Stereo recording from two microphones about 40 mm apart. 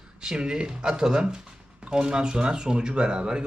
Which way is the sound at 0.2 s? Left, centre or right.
Centre.